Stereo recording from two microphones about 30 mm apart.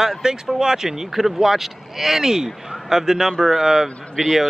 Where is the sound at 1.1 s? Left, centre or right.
Centre.